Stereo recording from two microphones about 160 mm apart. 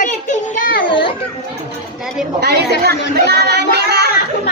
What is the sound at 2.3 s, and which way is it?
Speech, 90° right.